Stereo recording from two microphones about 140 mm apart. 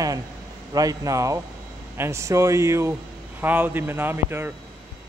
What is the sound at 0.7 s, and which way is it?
Speech, 25° right (ahead or behind).